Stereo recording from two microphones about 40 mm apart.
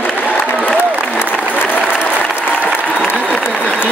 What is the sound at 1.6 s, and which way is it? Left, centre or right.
Applause, left.